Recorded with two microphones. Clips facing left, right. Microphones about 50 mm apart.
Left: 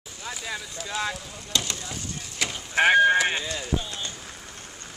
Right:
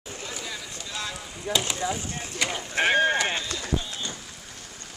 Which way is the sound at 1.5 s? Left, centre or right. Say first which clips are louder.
Right 3 dB; centre.